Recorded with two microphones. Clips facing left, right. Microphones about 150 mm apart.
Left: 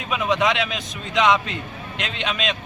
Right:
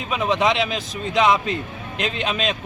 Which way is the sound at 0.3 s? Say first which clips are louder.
Right 2 dB; 30° right (ahead or behind).